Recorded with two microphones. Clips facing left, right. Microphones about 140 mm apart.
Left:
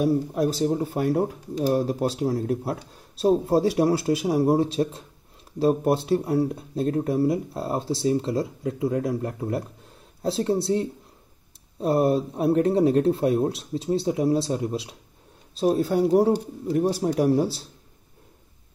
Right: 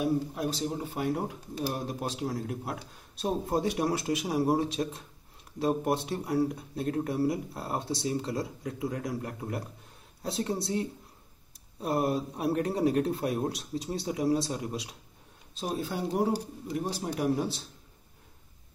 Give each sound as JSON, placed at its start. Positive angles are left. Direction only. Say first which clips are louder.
{"t": 0.0, "sound": "speech", "louder": "left 7 dB", "side_deg": 45}